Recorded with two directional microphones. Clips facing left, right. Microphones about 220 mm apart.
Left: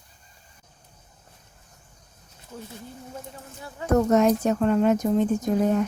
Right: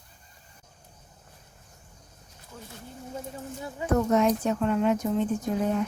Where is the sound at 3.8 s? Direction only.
45° left (ahead or behind).